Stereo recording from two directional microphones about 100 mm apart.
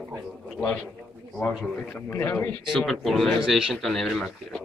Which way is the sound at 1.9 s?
20° left (ahead or behind).